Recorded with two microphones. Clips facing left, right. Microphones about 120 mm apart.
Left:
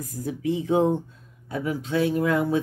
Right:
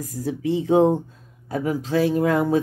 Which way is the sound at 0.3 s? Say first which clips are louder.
Right 4 dB; 30° right (ahead or behind).